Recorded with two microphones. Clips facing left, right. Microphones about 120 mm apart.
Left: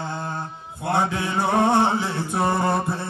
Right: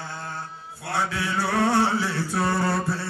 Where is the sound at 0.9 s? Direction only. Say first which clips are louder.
Left 4 dB; 20° left (ahead or behind).